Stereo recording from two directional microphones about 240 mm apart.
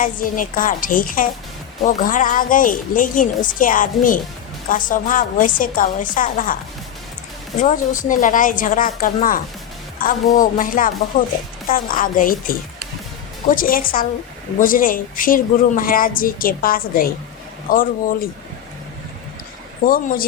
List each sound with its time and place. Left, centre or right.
0.0 s a woman's voice: left
7.6 s a woman's voice: left
13.6 s a woman's voice: left
19.8 s a woman's voice: left